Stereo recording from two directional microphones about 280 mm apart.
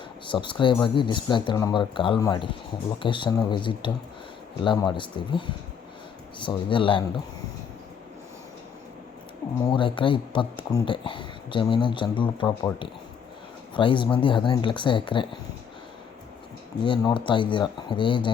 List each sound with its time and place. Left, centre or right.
0.3 s speech: centre
9.6 s speech: centre
16.8 s speech: centre